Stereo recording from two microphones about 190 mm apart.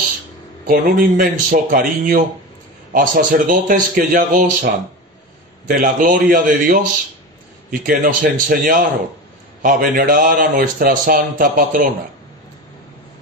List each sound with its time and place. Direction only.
0.7 s a man's voice: 50° right (ahead or behind)
5.7 s a man's voice: 45° right (ahead or behind)
7.8 s a man's voice: 45° right (ahead or behind)